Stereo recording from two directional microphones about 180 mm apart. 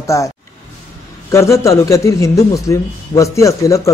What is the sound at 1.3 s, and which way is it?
A man's voice, 15° left (ahead or behind).